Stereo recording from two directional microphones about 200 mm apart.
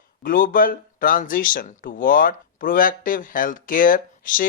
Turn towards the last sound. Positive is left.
turn(degrees=45)  # may be behind; listen again after turning